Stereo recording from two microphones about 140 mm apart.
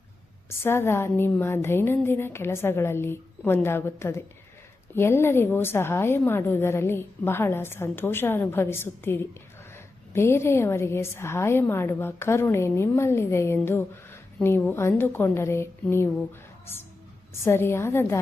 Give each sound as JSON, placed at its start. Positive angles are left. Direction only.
{"t": 0.6, "sound": "a woman's voice", "side_deg": 15}
{"t": 17.4, "sound": "a woman's voice", "side_deg": 15}